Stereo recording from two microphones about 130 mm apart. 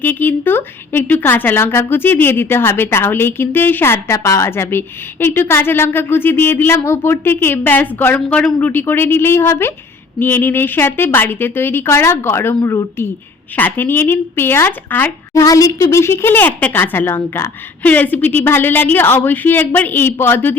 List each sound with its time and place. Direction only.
0.0 s speech: 15° left (ahead or behind)
15.3 s speech: 25° left (ahead or behind)